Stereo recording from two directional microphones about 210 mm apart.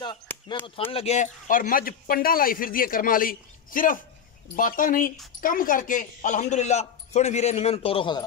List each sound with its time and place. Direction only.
0.9 s a man's voice: 30° left (ahead or behind)